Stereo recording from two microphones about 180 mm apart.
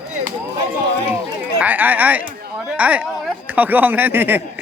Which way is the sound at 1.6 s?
10° right (ahead or behind).